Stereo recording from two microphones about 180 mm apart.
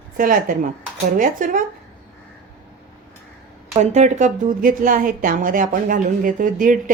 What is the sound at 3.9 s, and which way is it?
A woman's voice, 40° right (ahead or behind).